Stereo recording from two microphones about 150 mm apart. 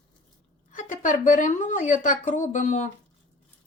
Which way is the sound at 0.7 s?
60° left (ahead or behind).